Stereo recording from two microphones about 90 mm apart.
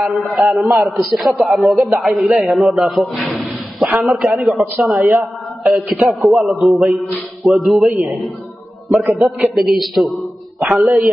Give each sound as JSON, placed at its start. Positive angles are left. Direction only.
{"t": 0.0, "sound": "a man's voice", "side_deg": 0}
{"t": 5.6, "sound": "a man's voice", "side_deg": -15}
{"t": 5.9, "sound": "a man's voice", "side_deg": 0}
{"t": 8.9, "sound": "a man's voice", "side_deg": -30}
{"t": 9.2, "sound": "a man's voice", "side_deg": 0}